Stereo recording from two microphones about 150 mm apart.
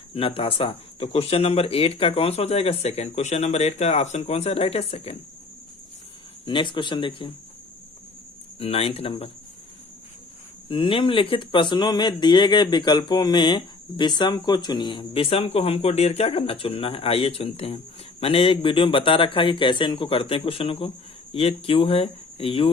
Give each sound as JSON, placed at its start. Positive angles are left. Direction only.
{"t": 0.1, "sound": "speech", "side_deg": 40}
{"t": 6.4, "sound": "speech", "side_deg": 35}
{"t": 8.5, "sound": "speech", "side_deg": 40}
{"t": 10.7, "sound": "speech", "side_deg": 35}